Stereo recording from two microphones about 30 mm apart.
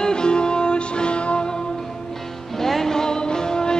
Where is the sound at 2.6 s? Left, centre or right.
Centre.